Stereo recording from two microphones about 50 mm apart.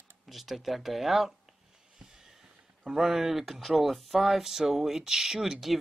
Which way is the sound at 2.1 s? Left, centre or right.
Centre.